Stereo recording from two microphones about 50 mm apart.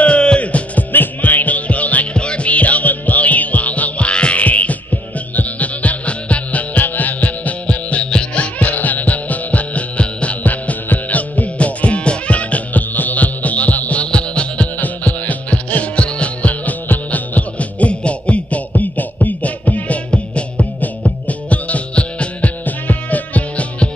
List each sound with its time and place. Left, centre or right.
0.0 s music: left
8.5 s music: left
14.8 s music: left